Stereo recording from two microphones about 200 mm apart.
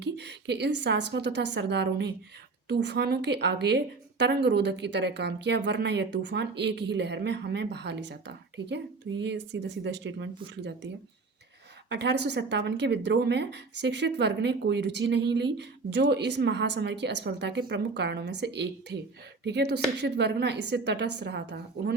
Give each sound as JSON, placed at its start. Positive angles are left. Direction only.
{"t": 0.0, "sound": "a woman's voice", "side_deg": -55}
{"t": 11.9, "sound": "a woman's voice", "side_deg": -60}